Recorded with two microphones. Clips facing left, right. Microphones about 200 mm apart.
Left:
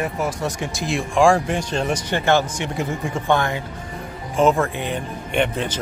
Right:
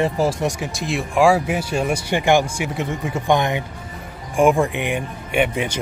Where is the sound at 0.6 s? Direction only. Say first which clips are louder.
Even; centre (ahead or behind).